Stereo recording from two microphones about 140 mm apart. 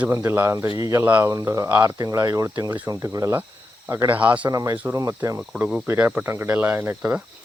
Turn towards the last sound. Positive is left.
turn(degrees=-15)  # may be behind; listen again after turning